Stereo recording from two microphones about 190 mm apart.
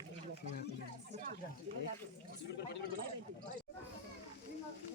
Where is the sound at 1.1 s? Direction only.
45° right (ahead or behind).